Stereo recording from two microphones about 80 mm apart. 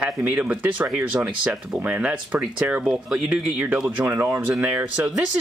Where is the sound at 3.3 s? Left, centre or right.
Centre.